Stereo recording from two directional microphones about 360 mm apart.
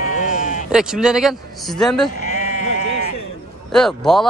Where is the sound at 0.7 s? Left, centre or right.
Centre.